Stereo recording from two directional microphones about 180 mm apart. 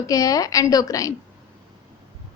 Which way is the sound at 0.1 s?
20° left (ahead or behind).